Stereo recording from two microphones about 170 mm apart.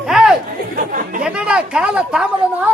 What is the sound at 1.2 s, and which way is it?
Speech, 5° right (ahead or behind).